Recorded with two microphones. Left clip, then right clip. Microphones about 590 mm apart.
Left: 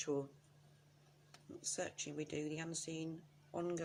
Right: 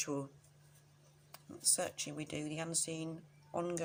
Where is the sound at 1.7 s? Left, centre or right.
Left.